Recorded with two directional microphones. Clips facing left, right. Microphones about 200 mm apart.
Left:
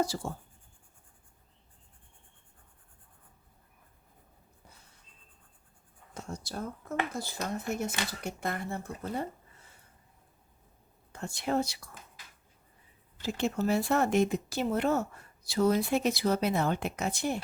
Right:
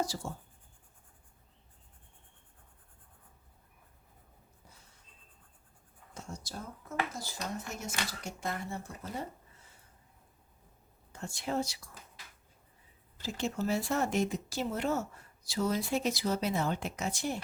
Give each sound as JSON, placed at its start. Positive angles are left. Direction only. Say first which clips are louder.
{"t": 0.0, "sound": "speech", "louder": "left 4 dB", "side_deg": 60}
{"t": 6.1, "sound": "speech", "louder": "left 5 dB", "side_deg": 60}
{"t": 11.1, "sound": "speech", "louder": "left 4 dB", "side_deg": 60}
{"t": 13.2, "sound": "speech", "louder": "left 4 dB", "side_deg": 60}